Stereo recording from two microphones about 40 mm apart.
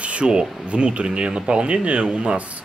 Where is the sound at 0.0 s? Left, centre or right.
Right.